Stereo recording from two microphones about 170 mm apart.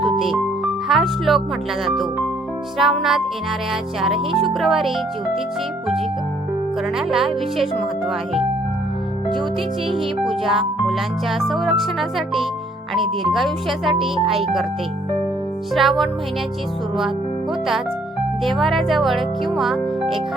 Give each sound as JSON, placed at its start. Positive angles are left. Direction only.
{"t": 0.2, "sound": "speech", "side_deg": 0}
{"t": 4.3, "sound": "speech", "side_deg": -35}
{"t": 4.6, "sound": "speech", "side_deg": 0}
{"t": 7.1, "sound": "speech", "side_deg": 0}
{"t": 9.9, "sound": "speech", "side_deg": 0}
{"t": 15.7, "sound": "speech", "side_deg": 0}
{"t": 18.4, "sound": "speech", "side_deg": 0}